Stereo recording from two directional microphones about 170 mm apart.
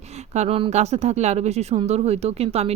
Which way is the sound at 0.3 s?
35° right (ahead or behind).